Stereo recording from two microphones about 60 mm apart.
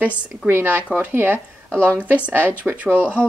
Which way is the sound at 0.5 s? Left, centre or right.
Right.